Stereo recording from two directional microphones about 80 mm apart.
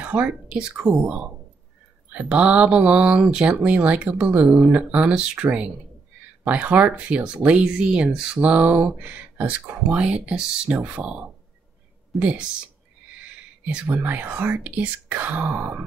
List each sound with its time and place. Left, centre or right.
0.0 s speech: centre
13.9 s speech: right